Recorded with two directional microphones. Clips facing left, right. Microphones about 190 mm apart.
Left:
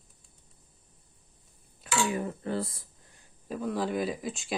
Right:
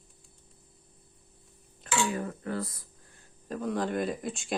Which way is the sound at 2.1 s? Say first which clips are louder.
Left 2 dB; 20° left (ahead or behind).